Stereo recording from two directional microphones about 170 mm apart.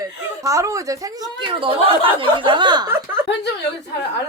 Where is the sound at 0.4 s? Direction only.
20° right (ahead or behind).